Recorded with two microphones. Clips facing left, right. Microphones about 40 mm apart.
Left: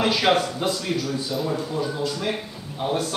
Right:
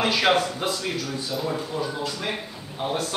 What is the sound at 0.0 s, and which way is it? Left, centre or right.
Speech, centre.